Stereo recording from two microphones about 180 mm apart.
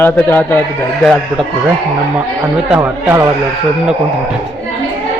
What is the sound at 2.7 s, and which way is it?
Speech, 10° right (ahead or behind).